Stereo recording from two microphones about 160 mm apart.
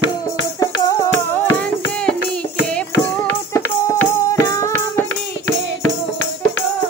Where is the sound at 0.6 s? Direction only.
20° left (ahead or behind).